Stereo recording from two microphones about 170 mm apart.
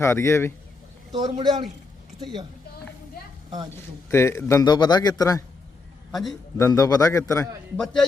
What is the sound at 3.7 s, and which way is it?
A man's voice, 15° left (ahead or behind).